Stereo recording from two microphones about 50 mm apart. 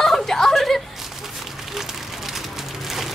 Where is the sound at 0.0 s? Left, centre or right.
Centre.